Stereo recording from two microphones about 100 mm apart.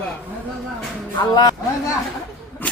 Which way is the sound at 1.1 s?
45° left (ahead or behind).